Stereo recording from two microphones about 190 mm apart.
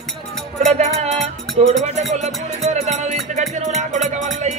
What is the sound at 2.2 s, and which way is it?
Music, 35° right (ahead or behind).